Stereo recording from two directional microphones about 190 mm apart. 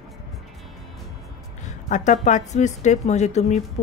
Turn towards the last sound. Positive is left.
turn(degrees=35)  # may be behind; listen again after turning